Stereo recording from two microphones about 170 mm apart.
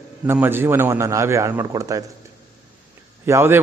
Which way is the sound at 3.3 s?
15° right (ahead or behind).